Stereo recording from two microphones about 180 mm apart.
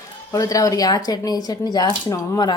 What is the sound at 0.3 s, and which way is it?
Speech, 20° left (ahead or behind).